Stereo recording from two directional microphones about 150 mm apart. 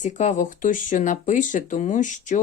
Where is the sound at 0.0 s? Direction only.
55° left (ahead or behind).